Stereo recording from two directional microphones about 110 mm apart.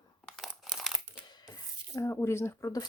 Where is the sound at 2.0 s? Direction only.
25° left (ahead or behind).